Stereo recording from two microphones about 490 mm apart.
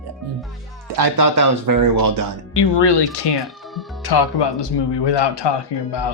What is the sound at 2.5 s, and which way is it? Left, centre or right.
Speech, left.